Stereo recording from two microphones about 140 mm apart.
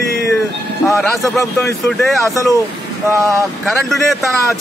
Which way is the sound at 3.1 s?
20° right (ahead or behind).